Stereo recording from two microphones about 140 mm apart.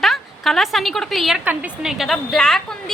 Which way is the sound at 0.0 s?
Centre (ahead or behind).